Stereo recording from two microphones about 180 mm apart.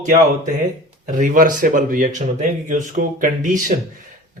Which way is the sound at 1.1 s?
45° right (ahead or behind).